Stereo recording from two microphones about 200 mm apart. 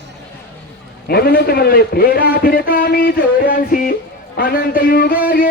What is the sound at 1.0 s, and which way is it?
Speech, 50° left (ahead or behind).